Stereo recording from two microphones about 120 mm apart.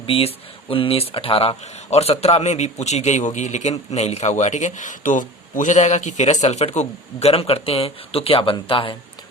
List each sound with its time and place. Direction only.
0.1 s speech: 50° left (ahead or behind)